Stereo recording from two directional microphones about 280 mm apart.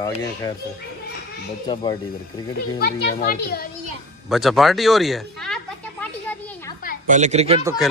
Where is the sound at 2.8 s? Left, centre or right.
Left.